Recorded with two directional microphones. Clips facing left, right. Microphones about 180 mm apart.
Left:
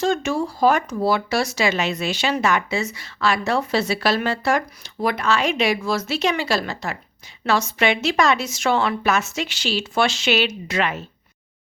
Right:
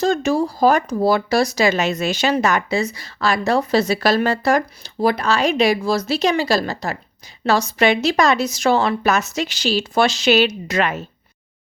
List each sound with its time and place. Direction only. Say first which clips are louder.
0.0 s speech: right 3 dB; 35° right (ahead or behind)